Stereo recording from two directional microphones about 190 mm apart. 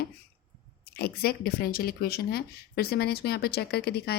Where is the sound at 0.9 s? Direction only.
55° left (ahead or behind).